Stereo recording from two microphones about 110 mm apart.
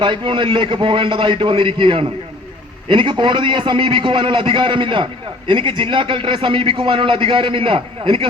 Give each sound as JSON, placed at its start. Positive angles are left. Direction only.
{"t": 0.0, "sound": "a man's voice", "side_deg": -45}